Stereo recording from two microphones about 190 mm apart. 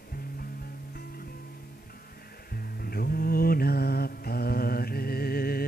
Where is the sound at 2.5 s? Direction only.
50° left (ahead or behind).